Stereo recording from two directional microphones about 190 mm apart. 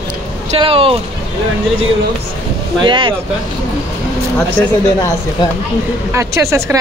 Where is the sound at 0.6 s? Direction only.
30° right (ahead or behind).